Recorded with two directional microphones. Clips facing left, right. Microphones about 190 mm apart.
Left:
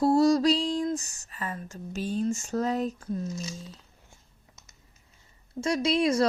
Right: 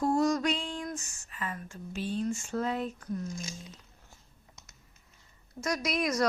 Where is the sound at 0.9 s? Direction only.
35° left (ahead or behind).